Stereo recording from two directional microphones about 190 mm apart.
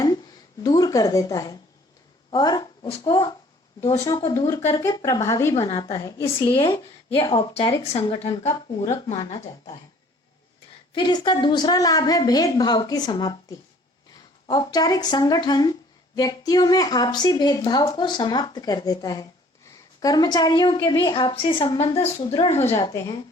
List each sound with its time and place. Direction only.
0.6 s a woman's voice: 20° left (ahead or behind)
10.9 s a woman's voice: 25° left (ahead or behind)
22.8 s a woman's voice: 20° left (ahead or behind)